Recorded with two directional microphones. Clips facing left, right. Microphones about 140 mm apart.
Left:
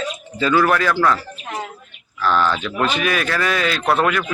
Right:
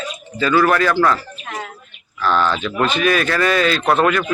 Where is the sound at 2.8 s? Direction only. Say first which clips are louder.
Right 3 dB; 10° left (ahead or behind).